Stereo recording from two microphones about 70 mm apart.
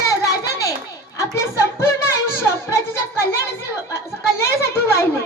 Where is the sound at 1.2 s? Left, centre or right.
Left.